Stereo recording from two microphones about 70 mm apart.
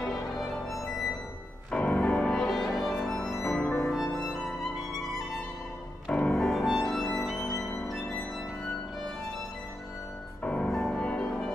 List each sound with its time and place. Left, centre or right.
0.0 s music: centre
1.7 s music: centre
3.4 s music: centre
3.8 s music: centre
6.1 s music: centre
6.4 s music: centre
10.4 s music: centre
10.7 s music: centre